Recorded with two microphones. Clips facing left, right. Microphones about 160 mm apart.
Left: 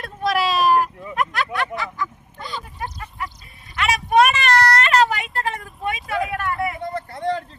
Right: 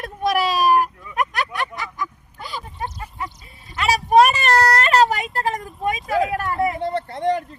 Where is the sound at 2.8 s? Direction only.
25° right (ahead or behind).